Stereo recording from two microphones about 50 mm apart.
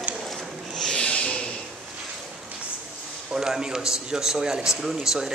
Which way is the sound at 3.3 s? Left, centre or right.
Centre.